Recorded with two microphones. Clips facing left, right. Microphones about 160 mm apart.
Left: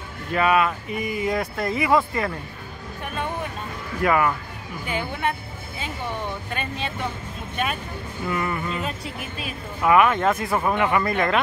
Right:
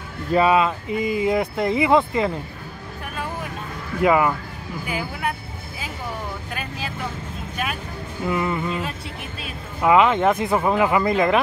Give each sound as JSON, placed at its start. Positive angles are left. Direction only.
{"t": 0.3, "sound": "speech", "side_deg": -25}
{"t": 4.0, "sound": "speech", "side_deg": -20}
{"t": 4.8, "sound": "speech", "side_deg": -5}
{"t": 6.5, "sound": "speech", "side_deg": -5}
{"t": 8.3, "sound": "speech", "side_deg": -20}
{"t": 8.6, "sound": "speech", "side_deg": -5}
{"t": 9.8, "sound": "speech", "side_deg": -20}